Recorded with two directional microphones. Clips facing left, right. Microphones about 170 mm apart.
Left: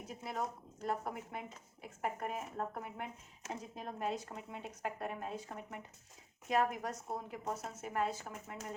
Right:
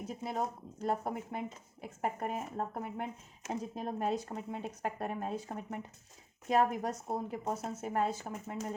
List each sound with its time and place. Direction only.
0.2 s speech: 25° right (ahead or behind)